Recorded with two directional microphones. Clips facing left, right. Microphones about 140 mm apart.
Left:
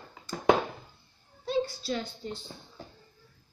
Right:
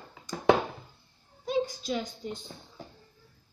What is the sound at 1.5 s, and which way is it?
Speech, 15° right (ahead or behind).